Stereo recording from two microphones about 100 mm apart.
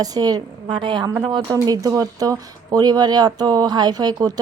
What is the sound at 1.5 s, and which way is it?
Speech, 35° right (ahead or behind).